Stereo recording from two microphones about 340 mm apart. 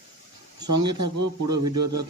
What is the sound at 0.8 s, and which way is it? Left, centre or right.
Speech, right.